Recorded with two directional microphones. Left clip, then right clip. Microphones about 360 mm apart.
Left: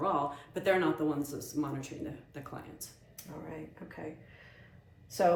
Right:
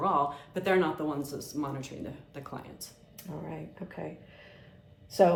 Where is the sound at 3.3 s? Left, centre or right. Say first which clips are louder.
Right 4 dB; right.